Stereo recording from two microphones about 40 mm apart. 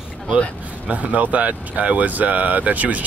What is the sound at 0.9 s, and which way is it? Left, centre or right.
Speech, right.